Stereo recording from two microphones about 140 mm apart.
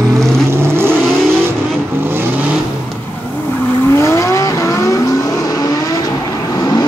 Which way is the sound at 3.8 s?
20° left (ahead or behind).